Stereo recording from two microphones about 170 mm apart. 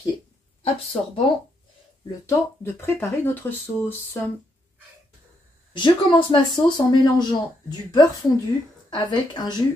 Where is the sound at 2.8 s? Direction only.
10° left (ahead or behind).